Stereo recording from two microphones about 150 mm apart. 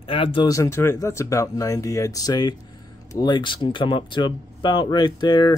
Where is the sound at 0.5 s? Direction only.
20° left (ahead or behind).